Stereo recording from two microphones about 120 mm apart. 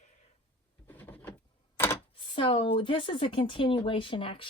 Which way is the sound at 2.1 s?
45° left (ahead or behind).